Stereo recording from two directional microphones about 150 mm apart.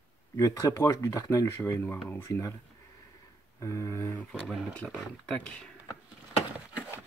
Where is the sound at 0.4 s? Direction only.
20° left (ahead or behind).